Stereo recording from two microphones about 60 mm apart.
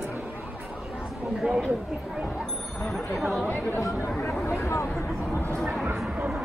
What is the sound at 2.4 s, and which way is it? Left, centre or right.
Music, centre.